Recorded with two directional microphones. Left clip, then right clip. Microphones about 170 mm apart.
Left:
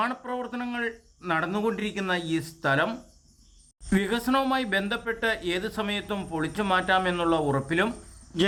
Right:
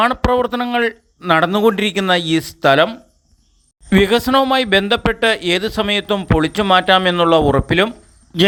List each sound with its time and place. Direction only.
0.0 s speech: 50° right (ahead or behind)